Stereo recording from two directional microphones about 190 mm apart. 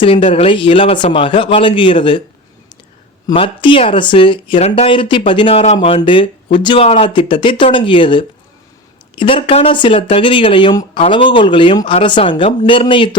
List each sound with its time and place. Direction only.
0.0 s speech: 30° left (ahead or behind)
3.2 s speech: 25° left (ahead or behind)